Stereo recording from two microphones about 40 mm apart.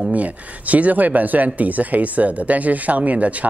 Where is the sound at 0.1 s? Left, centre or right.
Right.